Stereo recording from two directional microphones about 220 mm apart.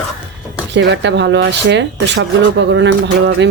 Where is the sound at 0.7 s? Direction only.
55° right (ahead or behind).